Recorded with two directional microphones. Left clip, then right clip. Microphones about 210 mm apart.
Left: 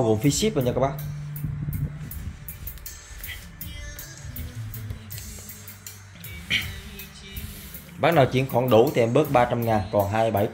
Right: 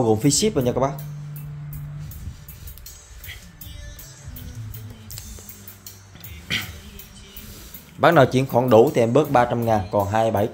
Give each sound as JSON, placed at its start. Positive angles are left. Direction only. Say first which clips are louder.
{"t": 0.0, "sound": "speech", "louder": "right 3 dB", "side_deg": -20}
{"t": 6.5, "sound": "music", "louder": "left 1 dB", "side_deg": -30}
{"t": 8.0, "sound": "speech", "louder": "right 4 dB", "side_deg": -30}